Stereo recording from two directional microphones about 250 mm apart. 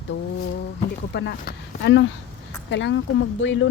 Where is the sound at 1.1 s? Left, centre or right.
Left.